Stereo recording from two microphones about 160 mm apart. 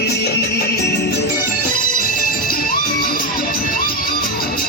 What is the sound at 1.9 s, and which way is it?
Music, 60° left (ahead or behind).